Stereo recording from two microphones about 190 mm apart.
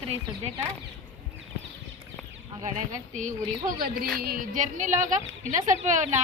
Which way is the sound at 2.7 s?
40° right (ahead or behind).